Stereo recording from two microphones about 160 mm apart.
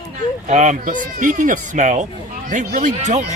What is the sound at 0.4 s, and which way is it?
Speech, 45° right (ahead or behind).